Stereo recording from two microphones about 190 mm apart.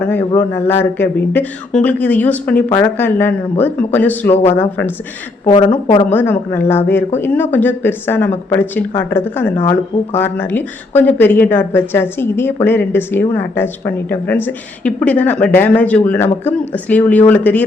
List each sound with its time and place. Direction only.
0.0 s speech: 10° left (ahead or behind)
5.5 s speech: 25° left (ahead or behind)
6.1 s speech: 10° left (ahead or behind)